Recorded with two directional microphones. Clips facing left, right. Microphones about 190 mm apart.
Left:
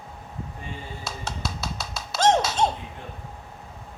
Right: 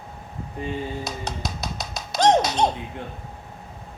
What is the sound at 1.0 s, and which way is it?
Music, 15° right (ahead or behind).